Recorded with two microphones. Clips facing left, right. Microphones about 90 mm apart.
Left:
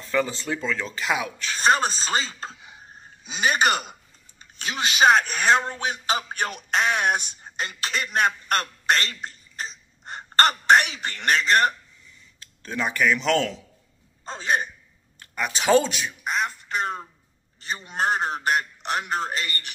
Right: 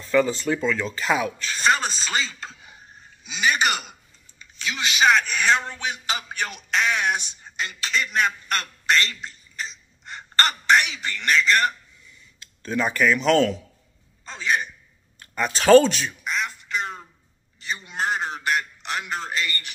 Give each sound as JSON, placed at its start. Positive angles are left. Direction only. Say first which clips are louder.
{"t": 0.0, "sound": "speech", "louder": "right 4 dB", "side_deg": 20}
{"t": 0.6, "sound": "speech", "louder": "right 4 dB", "side_deg": -15}
{"t": 0.9, "sound": "speech", "louder": "right 3 dB", "side_deg": 15}
{"t": 1.6, "sound": "a man's voice", "louder": "left 1 dB", "side_deg": 40}
{"t": 12.7, "sound": "speech", "louder": "right 2 dB", "side_deg": 20}
{"t": 13.2, "sound": "a man's voice", "louder": "right 4 dB", "side_deg": -20}
{"t": 14.2, "sound": "a man's voice", "louder": "even", "side_deg": 45}
{"t": 15.4, "sound": "speech", "louder": "right 6 dB", "side_deg": 15}
{"t": 16.3, "sound": "a man's voice", "louder": "left 3 dB", "side_deg": 45}